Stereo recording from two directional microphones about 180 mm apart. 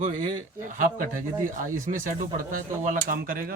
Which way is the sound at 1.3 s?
15° right (ahead or behind).